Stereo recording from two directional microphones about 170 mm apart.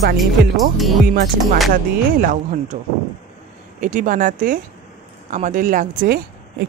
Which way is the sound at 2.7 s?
55° right (ahead or behind).